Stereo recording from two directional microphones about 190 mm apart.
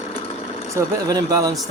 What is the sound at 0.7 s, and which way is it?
Speech, 20° right (ahead or behind).